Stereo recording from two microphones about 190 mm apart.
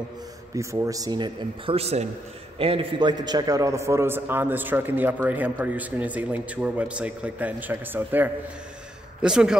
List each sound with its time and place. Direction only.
0.6 s a man's voice: 15° right (ahead or behind)